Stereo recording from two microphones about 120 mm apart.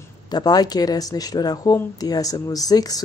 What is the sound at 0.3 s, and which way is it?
Speech, 35° left (ahead or behind).